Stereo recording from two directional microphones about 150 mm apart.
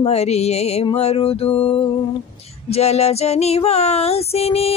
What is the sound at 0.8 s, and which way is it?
Child singing, 40° left (ahead or behind).